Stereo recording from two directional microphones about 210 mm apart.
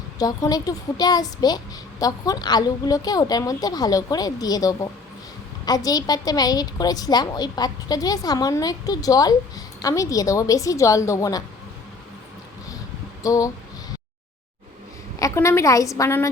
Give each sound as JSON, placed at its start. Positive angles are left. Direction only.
{"t": 0.2, "sound": "a woman's voice", "side_deg": 15}
{"t": 13.2, "sound": "a woman's voice", "side_deg": 15}
{"t": 15.2, "sound": "a woman's voice", "side_deg": 15}